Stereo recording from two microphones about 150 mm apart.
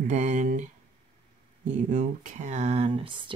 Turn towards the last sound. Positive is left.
turn(degrees=-40)  # may be behind; listen again after turning